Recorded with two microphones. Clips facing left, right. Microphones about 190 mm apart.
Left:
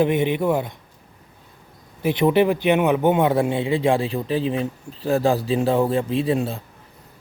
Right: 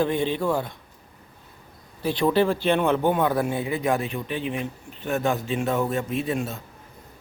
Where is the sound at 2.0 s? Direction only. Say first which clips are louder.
Left 4 dB; 20° left (ahead or behind).